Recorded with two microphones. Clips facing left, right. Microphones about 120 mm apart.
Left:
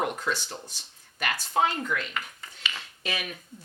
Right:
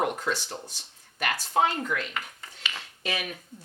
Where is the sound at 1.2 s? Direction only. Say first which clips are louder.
Right 1 dB; 50° right (ahead or behind).